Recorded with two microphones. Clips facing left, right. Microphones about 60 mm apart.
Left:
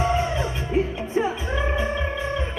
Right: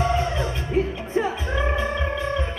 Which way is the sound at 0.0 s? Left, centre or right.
Centre.